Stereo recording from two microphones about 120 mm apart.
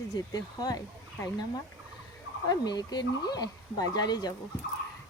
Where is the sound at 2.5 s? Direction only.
35° left (ahead or behind).